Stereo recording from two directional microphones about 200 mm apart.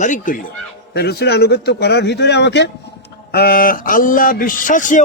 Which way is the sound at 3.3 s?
50° left (ahead or behind).